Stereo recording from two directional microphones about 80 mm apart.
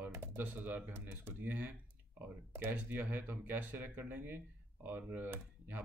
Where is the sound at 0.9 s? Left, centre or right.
Right.